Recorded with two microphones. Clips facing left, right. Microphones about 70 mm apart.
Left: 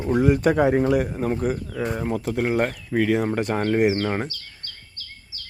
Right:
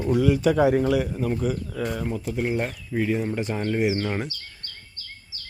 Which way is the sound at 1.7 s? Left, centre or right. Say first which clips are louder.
Left 2 dB; left.